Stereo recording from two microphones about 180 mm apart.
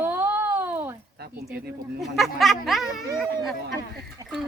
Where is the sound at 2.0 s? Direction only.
Centre (ahead or behind).